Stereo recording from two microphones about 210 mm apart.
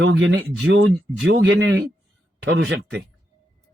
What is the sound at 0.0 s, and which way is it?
Speech, 60° right (ahead or behind).